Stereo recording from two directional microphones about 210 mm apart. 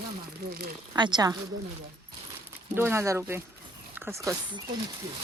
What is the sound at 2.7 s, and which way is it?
Speech, 10° right (ahead or behind).